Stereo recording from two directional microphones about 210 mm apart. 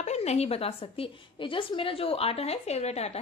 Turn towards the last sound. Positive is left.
turn(degrees=30)  # may be behind; listen again after turning